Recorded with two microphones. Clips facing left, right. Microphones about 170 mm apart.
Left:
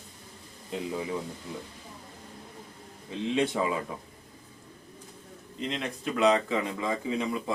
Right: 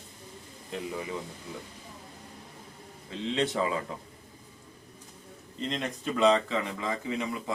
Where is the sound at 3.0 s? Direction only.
15° left (ahead or behind).